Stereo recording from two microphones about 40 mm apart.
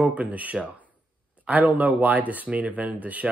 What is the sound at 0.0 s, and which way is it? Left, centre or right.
Speech, right.